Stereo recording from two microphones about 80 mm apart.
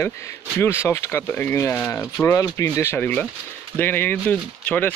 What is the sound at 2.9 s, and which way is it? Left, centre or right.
Speech, left.